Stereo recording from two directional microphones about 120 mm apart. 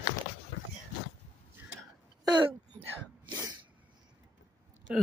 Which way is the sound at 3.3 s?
35° right (ahead or behind).